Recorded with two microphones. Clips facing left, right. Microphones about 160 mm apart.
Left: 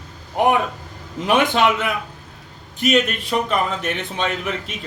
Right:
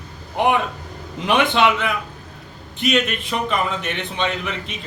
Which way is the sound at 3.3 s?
Centre (ahead or behind).